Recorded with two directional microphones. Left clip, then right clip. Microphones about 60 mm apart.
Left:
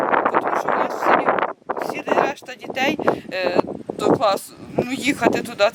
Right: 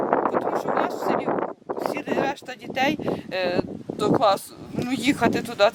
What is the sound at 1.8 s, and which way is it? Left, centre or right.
Speech, centre.